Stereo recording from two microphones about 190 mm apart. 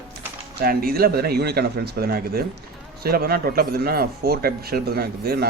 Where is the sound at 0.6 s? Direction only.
50° right (ahead or behind).